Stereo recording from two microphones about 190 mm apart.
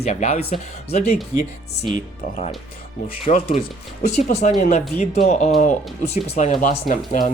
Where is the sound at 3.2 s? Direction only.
35° left (ahead or behind).